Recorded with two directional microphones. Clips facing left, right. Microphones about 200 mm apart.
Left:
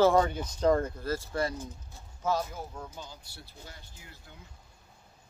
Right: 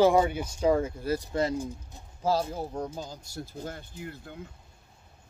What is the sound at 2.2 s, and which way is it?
Speech, 30° right (ahead or behind).